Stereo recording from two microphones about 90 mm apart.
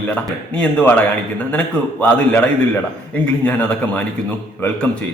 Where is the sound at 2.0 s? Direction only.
20° left (ahead or behind).